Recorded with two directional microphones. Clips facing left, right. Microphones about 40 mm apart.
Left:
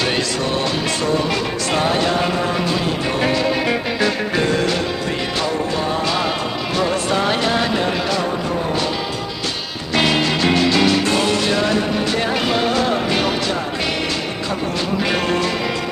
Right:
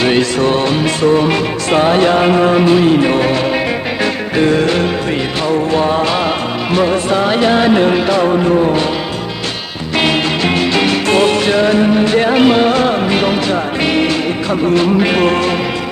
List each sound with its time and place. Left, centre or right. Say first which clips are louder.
0.0 s music: right 7 dB; right
4.4 s music: right 9 dB; right
7.1 s music: right 6 dB; centre; by 8.8 s right
10.8 s music: right 4 dB; right